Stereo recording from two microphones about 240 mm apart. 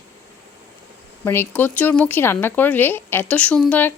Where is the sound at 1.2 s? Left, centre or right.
Centre.